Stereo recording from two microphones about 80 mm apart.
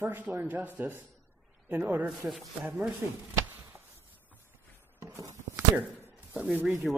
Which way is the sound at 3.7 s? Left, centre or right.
Right.